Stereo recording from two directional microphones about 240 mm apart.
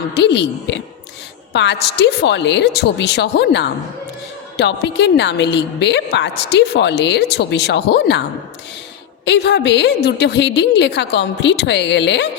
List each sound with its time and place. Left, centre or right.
0.1 s a woman's voice: left
9.2 s a woman's voice: left